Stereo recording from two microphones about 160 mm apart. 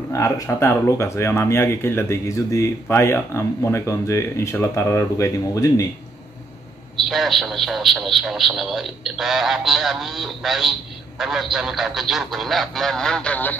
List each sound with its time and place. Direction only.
0.1 s speech: 20° left (ahead or behind)
7.0 s speech: centre (ahead or behind)